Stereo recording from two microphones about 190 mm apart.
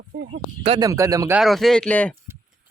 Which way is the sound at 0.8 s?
15° right (ahead or behind).